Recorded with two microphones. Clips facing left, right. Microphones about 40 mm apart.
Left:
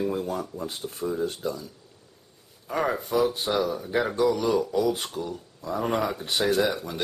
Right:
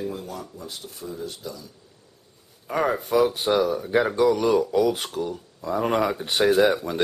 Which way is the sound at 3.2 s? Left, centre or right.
Right.